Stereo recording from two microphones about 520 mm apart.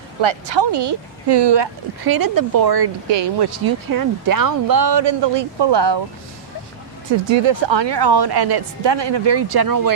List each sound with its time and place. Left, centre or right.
0.2 s speech: right
7.3 s speech: right